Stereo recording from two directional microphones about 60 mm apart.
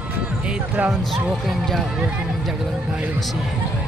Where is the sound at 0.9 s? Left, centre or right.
Centre.